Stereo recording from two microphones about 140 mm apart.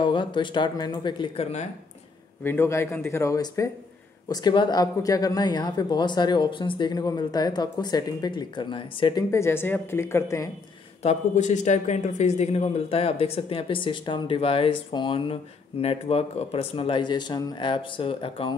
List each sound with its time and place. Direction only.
0.0 s speech: 35° left (ahead or behind)
2.4 s speech: 15° left (ahead or behind); by 9.2 s 35° left (ahead or behind)
9.3 s speech: 20° left (ahead or behind)
11.0 s speech: 55° left (ahead or behind)